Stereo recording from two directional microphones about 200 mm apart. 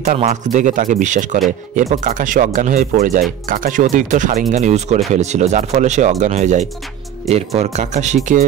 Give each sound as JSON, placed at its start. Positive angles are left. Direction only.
{"t": 0.0, "sound": "speech", "side_deg": -35}